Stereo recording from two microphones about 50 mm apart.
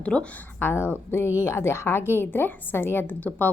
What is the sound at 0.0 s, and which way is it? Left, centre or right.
Speech, left.